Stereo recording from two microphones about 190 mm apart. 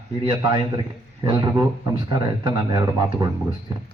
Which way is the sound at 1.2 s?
20° right (ahead or behind).